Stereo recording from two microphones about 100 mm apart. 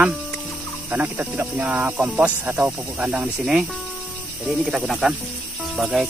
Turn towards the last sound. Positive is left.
turn(degrees=0)  # may be behind; listen again after turning